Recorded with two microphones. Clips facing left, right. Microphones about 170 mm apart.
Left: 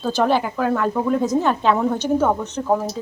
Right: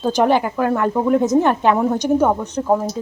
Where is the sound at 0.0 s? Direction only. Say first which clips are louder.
Right 3 dB; 15° right (ahead or behind).